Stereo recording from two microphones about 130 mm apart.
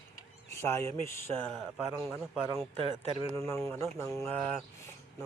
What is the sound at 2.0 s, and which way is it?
Speech, 5° right (ahead or behind).